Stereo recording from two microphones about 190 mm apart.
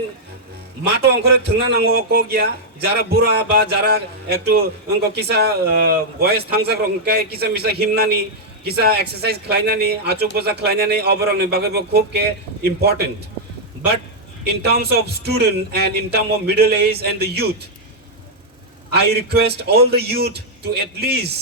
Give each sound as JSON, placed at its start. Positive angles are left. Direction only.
{"t": 0.9, "sound": "a man's voice", "side_deg": -60}
{"t": 14.4, "sound": "a man's voice", "side_deg": -60}
{"t": 18.9, "sound": "a man's voice", "side_deg": -60}